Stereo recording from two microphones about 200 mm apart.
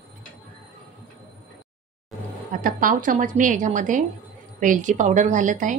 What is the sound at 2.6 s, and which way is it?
A woman's voice, 45° right (ahead or behind).